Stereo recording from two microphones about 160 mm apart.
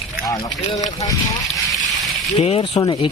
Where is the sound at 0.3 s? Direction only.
25° left (ahead or behind).